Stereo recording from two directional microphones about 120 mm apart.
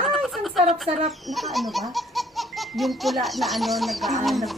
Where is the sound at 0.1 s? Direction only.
Centre (ahead or behind).